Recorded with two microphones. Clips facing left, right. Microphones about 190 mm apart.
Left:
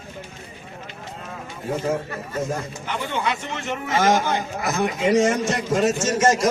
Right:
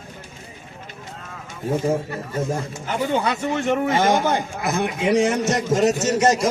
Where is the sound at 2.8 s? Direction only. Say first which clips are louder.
Right 4 dB; 40° right (ahead or behind).